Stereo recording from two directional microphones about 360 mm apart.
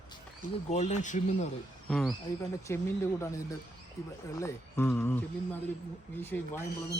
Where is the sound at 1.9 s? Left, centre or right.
Centre.